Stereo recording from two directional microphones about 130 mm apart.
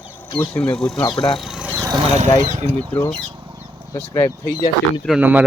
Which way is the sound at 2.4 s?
55° right (ahead or behind).